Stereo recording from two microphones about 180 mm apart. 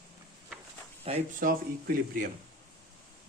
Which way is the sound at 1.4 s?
50° right (ahead or behind).